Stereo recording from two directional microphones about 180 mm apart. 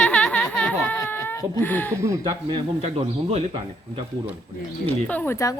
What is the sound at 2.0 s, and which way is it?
Speech, 15° right (ahead or behind).